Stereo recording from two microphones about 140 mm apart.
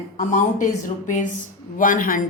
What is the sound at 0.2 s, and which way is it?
Speech, 60° left (ahead or behind).